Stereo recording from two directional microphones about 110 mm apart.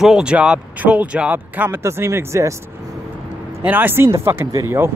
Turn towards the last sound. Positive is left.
turn(degrees=-20)  # may be behind; listen again after turning